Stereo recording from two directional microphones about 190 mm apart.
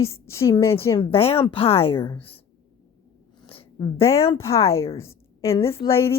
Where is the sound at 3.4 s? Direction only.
30° left (ahead or behind).